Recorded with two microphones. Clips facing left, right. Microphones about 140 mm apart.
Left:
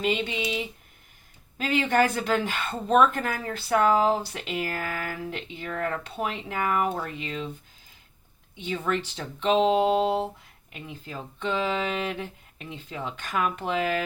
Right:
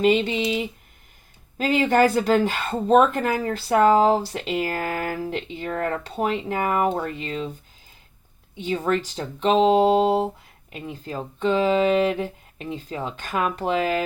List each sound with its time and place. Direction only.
0.0 s speech: 40° right (ahead or behind)
1.5 s speech: 40° right (ahead or behind)
8.5 s speech: 40° right (ahead or behind)